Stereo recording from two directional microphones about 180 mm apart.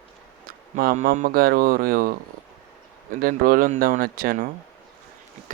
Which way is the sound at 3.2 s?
50° right (ahead or behind).